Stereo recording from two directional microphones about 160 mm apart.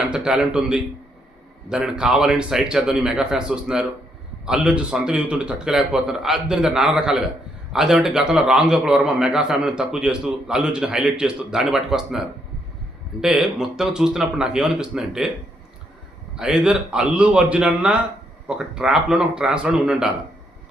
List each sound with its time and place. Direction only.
0.1 s a man's voice: 5° right (ahead or behind)
13.2 s a man's voice: 5° right (ahead or behind)
16.3 s a man's voice: 5° right (ahead or behind)